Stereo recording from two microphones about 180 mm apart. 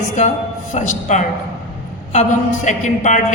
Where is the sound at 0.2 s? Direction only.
40° left (ahead or behind).